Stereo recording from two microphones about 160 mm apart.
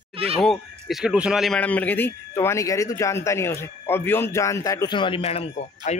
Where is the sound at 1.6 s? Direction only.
10° left (ahead or behind); by 5.5 s 40° left (ahead or behind).